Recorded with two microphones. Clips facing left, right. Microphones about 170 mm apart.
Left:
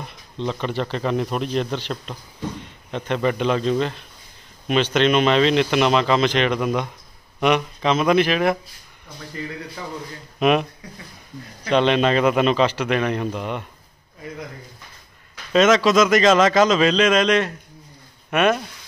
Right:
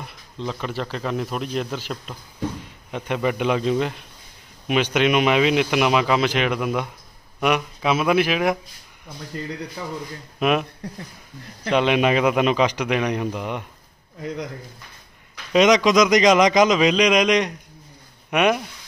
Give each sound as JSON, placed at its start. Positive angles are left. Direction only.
{"t": 0.0, "sound": "a man's voice", "side_deg": -5}
{"t": 11.7, "sound": "speech", "side_deg": -10}
{"t": 15.5, "sound": "speech", "side_deg": -15}